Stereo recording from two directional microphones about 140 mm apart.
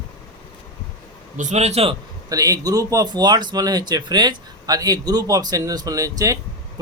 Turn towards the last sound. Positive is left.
turn(degrees=-25)  # may be behind; listen again after turning